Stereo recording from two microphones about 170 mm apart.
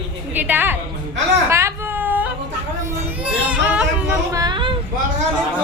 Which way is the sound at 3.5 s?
5° right (ahead or behind).